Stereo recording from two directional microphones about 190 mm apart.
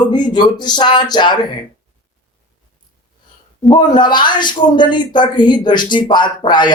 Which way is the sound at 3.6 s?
25° left (ahead or behind).